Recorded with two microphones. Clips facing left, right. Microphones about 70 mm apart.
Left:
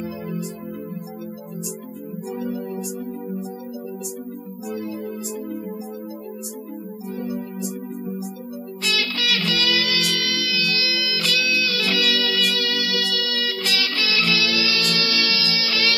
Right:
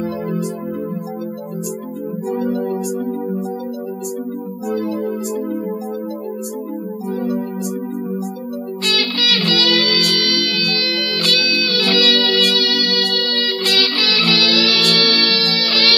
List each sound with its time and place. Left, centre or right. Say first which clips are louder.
0.0 s music: right 7 dB; right
2.2 s music: right 8 dB; right
4.6 s music: right 8 dB; right
7.2 s music: right 6 dB; right
8.8 s music: right 3 dB; centre
14.3 s music: right 5 dB; right